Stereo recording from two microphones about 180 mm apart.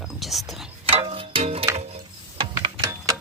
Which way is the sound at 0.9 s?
30° right (ahead or behind).